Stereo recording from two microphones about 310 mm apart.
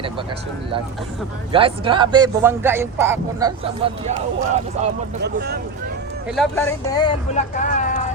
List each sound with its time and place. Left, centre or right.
1.5 s speech: centre
6.2 s speech: centre
6.9 s speech: centre